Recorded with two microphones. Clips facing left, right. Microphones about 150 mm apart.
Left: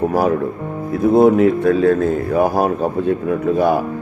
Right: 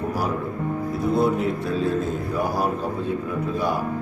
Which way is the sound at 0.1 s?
55° left (ahead or behind).